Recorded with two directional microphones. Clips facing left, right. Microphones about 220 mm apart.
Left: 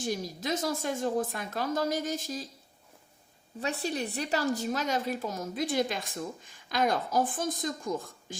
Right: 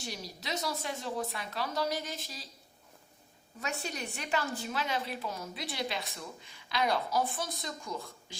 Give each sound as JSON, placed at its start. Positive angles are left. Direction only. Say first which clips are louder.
{"t": 0.0, "sound": "a woman's voice", "louder": "left 9 dB", "side_deg": 50}
{"t": 3.6, "sound": "a woman's voice", "louder": "left 6 dB", "side_deg": 35}